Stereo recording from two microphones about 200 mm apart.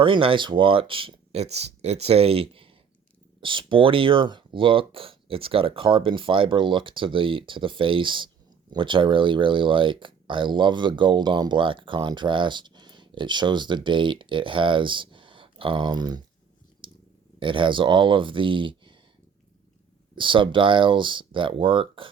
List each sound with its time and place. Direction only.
0.0 s speech: 25° right (ahead or behind)
16.8 s purr: 25° right (ahead or behind)
17.4 s speech: 25° right (ahead or behind)
20.1 s speech: 25° right (ahead or behind)